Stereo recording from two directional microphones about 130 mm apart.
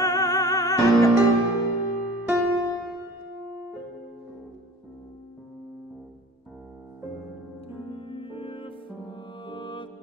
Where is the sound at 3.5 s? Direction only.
15° right (ahead or behind).